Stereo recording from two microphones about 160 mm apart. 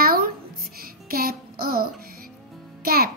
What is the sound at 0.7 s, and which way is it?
Music, 65° right (ahead or behind).